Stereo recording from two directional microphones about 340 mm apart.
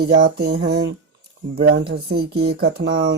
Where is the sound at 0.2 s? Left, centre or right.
Right.